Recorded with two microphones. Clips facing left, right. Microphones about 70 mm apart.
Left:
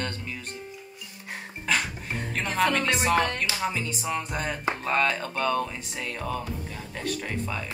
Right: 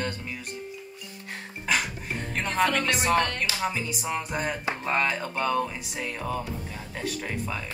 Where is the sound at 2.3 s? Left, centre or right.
Centre.